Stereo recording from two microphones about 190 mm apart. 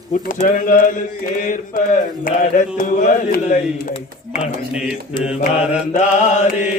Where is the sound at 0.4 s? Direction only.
45° left (ahead or behind).